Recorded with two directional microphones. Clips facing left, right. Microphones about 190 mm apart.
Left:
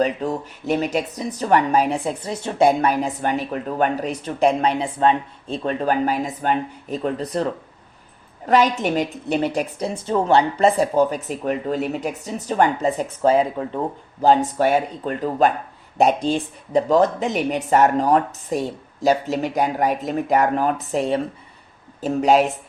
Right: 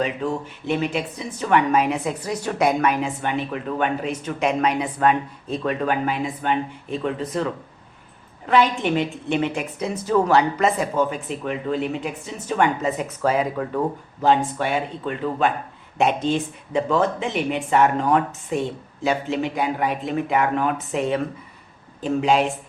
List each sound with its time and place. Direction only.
0.0 s speech: 35° left (ahead or behind)
8.4 s speech: 40° left (ahead or behind)
14.2 s speech: 40° left (ahead or behind)